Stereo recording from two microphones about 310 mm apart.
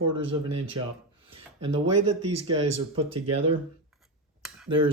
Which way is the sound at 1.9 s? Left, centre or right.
Right.